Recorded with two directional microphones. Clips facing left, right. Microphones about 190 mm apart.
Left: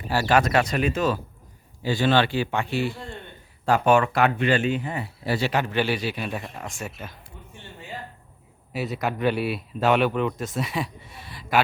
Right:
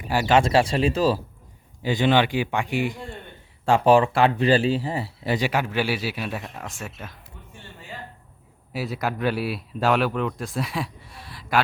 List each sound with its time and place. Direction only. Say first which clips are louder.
0.1 s speech: right 2 dB; 20° right (ahead or behind)
1.9 s speech: right 1 dB; 15° right (ahead or behind)
3.7 s speech: right 2 dB; 30° right (ahead or behind)
5.3 s speech: even; 15° right (ahead or behind)
8.7 s speech: even; centre (ahead or behind)